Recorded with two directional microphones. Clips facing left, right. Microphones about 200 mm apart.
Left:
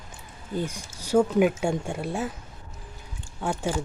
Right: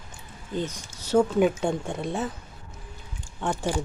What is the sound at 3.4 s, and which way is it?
Speech, 10° left (ahead or behind).